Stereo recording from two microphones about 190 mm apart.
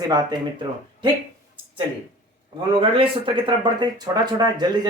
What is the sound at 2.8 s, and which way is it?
Speech, 25° right (ahead or behind).